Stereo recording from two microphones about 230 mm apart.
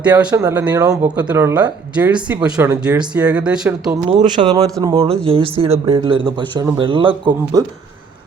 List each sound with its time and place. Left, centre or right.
0.3 s speech: centre
4.1 s speech: right